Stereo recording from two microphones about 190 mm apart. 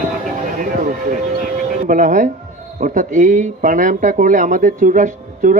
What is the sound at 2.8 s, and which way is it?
Speech, 45° right (ahead or behind).